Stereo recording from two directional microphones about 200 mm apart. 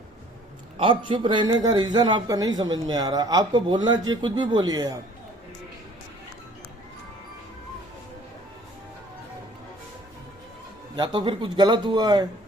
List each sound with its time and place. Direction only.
0.8 s a man's voice: 25° right (ahead or behind)
10.9 s a man's voice: 20° right (ahead or behind)